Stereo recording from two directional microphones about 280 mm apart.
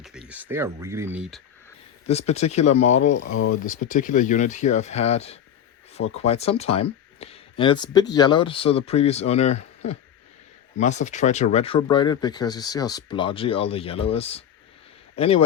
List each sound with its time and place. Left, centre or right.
0.0 s speech: centre
2.0 s speech: left
3.0 s speech: left
3.8 s speech: left